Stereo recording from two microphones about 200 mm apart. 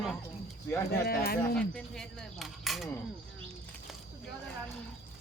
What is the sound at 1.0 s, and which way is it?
Speech, 50° left (ahead or behind).